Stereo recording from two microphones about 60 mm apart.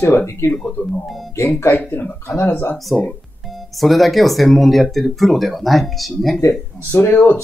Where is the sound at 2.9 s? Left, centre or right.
Centre.